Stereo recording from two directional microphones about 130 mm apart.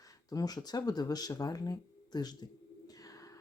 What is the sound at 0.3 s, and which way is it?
Speech, 30° left (ahead or behind).